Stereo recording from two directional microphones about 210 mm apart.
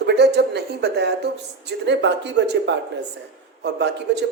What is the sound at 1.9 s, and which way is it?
Music, 55° right (ahead or behind).